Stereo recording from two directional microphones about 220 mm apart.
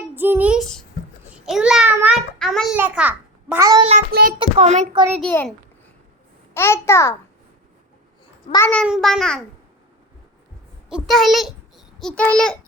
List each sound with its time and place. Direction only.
0.1 s a sound: 10° right (ahead or behind)
4.1 s a child's voice: 45° right (ahead or behind)
4.4 s a child's voice: 30° right (ahead or behind)
4.9 s a child's voice: 10° right (ahead or behind)
5.2 s a child's voice: 5° left (ahead or behind)
8.5 s a child's voice: 10° left (ahead or behind)
10.8 s a child's voice: centre (ahead or behind)